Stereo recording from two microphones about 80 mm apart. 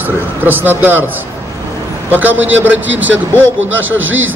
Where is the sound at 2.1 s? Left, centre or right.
Right.